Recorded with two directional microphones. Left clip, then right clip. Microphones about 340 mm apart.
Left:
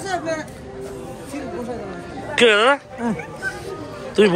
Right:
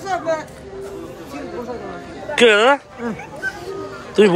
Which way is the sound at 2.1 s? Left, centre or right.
Centre.